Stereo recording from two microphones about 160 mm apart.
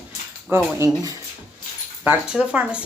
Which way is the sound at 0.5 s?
15° right (ahead or behind).